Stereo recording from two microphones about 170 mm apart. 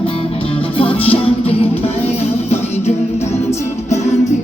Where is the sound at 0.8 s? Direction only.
35° left (ahead or behind).